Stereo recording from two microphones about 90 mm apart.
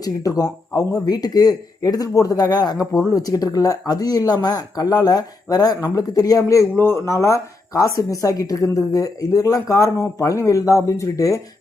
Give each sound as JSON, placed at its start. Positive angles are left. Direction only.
{"t": 0.0, "sound": "a man's voice", "side_deg": 40}
{"t": 6.7, "sound": "speech", "side_deg": 25}